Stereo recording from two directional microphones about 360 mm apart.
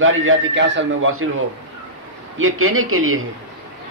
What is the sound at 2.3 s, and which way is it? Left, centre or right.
Speech, right.